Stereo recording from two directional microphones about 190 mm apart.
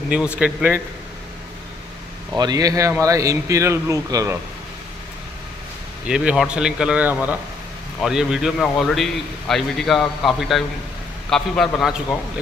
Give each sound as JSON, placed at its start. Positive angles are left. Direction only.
{"t": 0.4, "sound": "speech", "side_deg": -10}
{"t": 2.3, "sound": "speech", "side_deg": -20}
{"t": 6.0, "sound": "a man's voice", "side_deg": -5}